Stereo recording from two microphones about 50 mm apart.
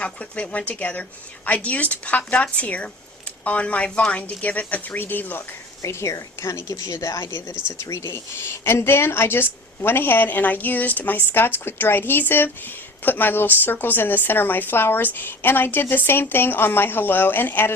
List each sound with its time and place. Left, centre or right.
0.0 s speech: left
5.8 s speech: left
7.8 s speech: left
11.2 s speech: left